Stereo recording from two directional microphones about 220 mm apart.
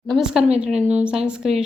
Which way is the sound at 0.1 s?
5° right (ahead or behind).